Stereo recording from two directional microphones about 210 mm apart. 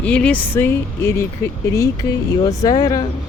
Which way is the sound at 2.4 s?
15° left (ahead or behind).